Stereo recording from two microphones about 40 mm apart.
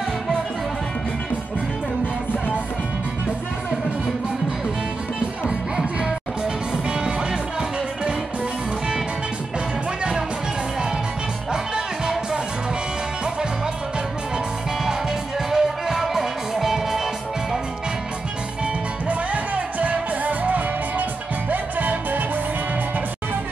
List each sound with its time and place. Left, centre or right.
6.4 s music: right
11.5 s music: centre
15.5 s music: centre
19.0 s music: right